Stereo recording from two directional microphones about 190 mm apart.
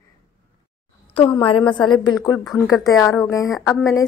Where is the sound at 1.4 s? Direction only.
25° left (ahead or behind).